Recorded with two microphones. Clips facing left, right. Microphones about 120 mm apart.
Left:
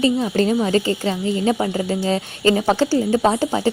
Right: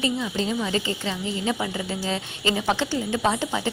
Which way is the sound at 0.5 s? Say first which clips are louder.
Left 8 dB; 40° left (ahead or behind).